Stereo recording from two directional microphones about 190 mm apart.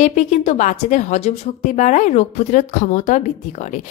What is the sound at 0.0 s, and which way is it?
A woman's voice, 40° left (ahead or behind).